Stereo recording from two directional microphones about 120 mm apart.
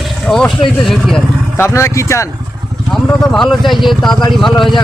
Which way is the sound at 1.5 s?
25° left (ahead or behind).